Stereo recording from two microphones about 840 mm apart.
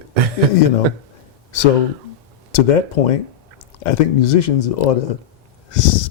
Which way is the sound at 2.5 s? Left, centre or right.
Left.